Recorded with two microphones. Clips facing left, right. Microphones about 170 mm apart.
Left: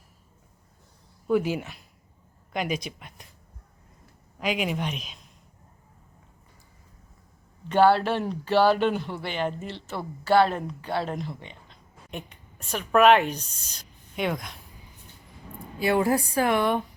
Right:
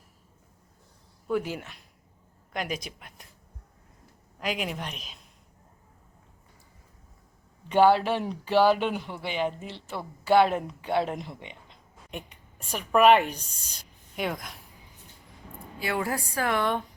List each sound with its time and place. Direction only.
1.3 s a woman's voice: 10° left (ahead or behind)
4.4 s a woman's voice: 5° left (ahead or behind)
7.7 s speech: 10° right (ahead or behind)
12.1 s a woman's voice: 10° right (ahead or behind)
15.8 s a woman's voice: 25° left (ahead or behind)